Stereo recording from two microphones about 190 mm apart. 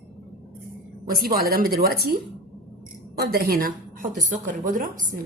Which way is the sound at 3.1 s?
55° right (ahead or behind).